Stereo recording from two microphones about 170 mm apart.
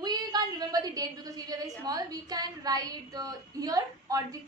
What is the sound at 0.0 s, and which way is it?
A woman's voice, 25° right (ahead or behind).